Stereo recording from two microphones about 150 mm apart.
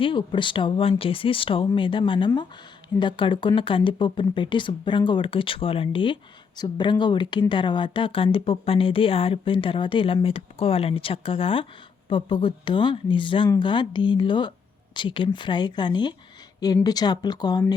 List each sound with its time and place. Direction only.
0.0 s speech: 35° left (ahead or behind)